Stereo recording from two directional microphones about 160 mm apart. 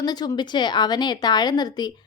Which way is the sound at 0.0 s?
25° left (ahead or behind).